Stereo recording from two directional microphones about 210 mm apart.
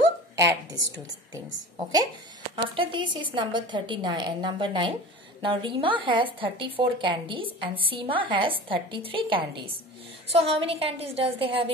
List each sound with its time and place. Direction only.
0.9 s a woman's voice: 20° right (ahead or behind)